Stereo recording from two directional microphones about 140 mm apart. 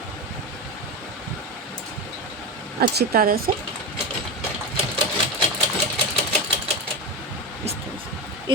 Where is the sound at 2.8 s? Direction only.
90° right.